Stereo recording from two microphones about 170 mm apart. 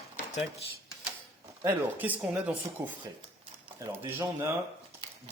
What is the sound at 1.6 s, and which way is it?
Speech, 10° right (ahead or behind).